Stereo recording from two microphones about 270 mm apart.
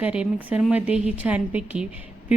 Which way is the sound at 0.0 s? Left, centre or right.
Centre.